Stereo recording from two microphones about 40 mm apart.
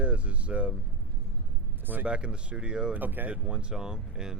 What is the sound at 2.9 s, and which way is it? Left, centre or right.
Speech, right.